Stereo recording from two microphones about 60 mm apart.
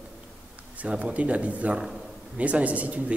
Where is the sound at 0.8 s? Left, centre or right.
Right.